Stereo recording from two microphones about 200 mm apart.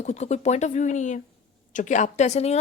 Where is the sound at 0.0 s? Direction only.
35° left (ahead or behind).